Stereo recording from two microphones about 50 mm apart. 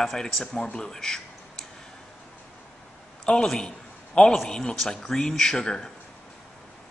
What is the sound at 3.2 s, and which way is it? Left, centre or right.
A man's voice, centre.